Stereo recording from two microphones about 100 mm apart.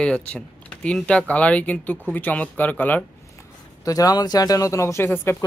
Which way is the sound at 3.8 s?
35° left (ahead or behind).